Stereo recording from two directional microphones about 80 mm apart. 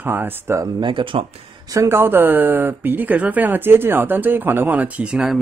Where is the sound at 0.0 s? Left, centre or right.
Right.